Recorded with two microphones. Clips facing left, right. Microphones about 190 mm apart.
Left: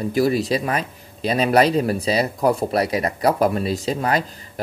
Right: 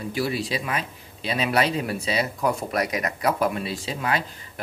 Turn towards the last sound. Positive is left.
turn(degrees=40)  # may be behind; listen again after turning